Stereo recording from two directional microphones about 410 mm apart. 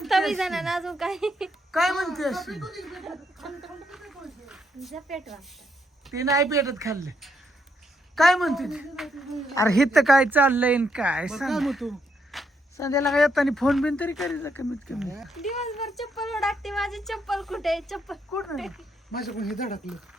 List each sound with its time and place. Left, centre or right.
0.0 s a woman's voice: centre
19.5 s speech: centre